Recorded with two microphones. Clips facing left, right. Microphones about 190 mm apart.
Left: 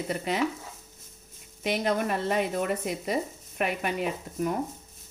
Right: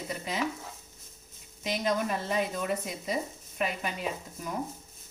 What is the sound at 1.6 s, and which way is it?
Speech, 60° left (ahead or behind).